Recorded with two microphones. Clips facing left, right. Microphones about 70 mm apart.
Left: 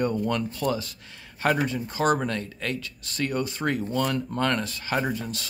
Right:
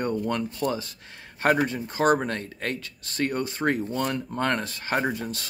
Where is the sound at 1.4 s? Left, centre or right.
Right.